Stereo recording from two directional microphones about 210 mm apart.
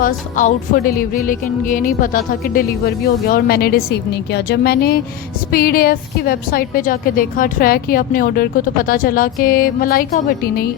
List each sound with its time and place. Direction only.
0.0 s a woman's voice: 40° left (ahead or behind)